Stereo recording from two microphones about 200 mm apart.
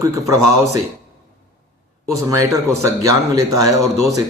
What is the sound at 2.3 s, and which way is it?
Speech, 15° right (ahead or behind).